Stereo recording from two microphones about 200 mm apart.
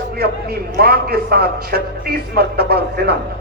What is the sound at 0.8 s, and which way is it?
Speech, 50° right (ahead or behind).